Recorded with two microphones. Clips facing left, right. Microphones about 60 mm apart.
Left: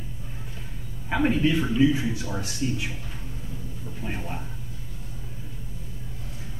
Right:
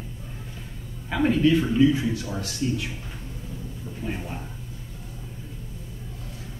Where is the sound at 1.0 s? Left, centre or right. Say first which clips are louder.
Right 2 dB; centre.